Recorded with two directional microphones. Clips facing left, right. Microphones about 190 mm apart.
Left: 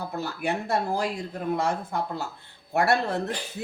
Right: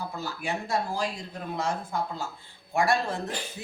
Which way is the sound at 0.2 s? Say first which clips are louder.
Left 6 dB; 60° left (ahead or behind).